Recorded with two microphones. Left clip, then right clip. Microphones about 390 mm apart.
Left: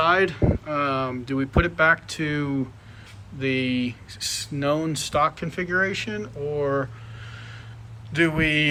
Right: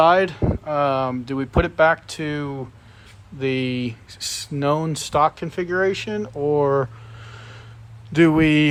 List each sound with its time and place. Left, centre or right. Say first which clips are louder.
0.0 s speech: right 4 dB; centre
8.2 s speech: right 5 dB; centre